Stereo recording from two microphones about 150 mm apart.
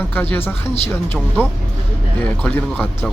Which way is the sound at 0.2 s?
15° left (ahead or behind).